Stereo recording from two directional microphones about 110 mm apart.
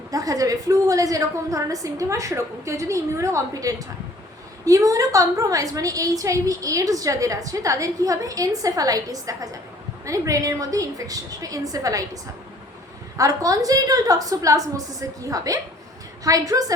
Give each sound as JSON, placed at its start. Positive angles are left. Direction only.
{"t": 0.1, "sound": "a woman's voice", "side_deg": -35}